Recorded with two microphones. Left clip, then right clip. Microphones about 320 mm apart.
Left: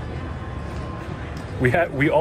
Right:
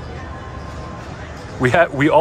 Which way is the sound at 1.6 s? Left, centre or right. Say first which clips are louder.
Right 5 dB; centre.